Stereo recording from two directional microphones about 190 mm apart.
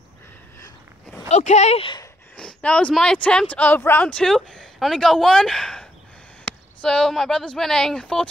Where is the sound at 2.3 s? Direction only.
5° left (ahead or behind).